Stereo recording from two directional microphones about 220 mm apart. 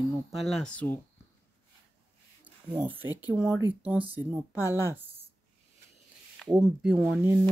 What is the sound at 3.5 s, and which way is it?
Speech, 15° left (ahead or behind).